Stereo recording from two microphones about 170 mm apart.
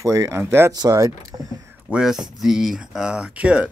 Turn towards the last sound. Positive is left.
turn(degrees=-5)  # may be behind; listen again after turning